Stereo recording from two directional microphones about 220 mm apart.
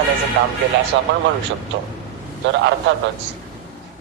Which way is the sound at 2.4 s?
55° right (ahead or behind).